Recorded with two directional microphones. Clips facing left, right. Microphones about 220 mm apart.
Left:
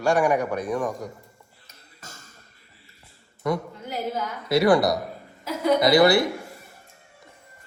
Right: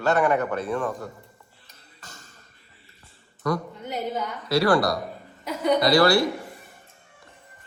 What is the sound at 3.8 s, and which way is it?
Speech, centre (ahead or behind).